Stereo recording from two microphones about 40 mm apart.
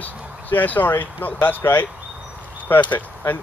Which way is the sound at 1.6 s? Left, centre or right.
Left.